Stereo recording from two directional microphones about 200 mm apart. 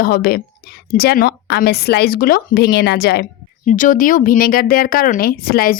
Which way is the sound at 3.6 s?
40° left (ahead or behind).